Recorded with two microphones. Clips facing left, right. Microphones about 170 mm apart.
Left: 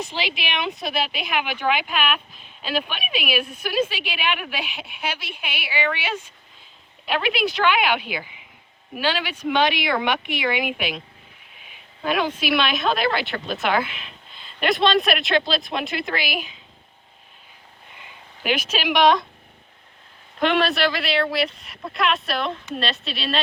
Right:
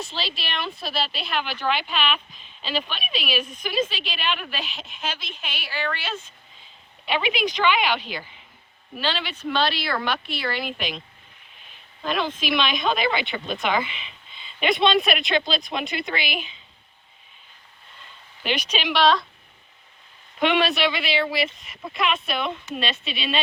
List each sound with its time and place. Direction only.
0.0 s speech: 15° left (ahead or behind)
7.0 s speech: centre (ahead or behind)
12.0 s speech: 10° left (ahead or behind)
17.9 s a sound: 10° left (ahead or behind)
18.9 s speech: 20° left (ahead or behind)
20.4 s speech: centre (ahead or behind)